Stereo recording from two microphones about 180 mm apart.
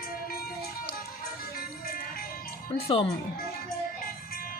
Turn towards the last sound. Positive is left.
turn(degrees=30)  # may be behind; listen again after turning